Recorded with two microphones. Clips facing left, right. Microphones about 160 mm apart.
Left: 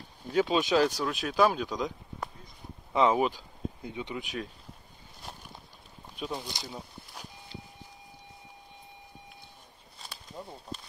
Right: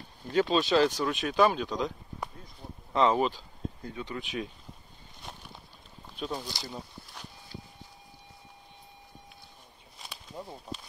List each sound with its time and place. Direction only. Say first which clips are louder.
0.3 s speech: right 1 dB; 5° left (ahead or behind)
2.9 s speech: even; 10° left (ahead or behind)
6.1 s speech: right 1 dB; 5° left (ahead or behind)
6.4 s speech: right 1 dB; 20° left (ahead or behind)
10.3 s speech: right 1 dB; centre (ahead or behind)